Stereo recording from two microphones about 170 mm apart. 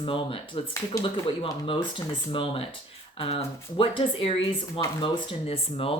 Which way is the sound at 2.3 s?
30° left (ahead or behind).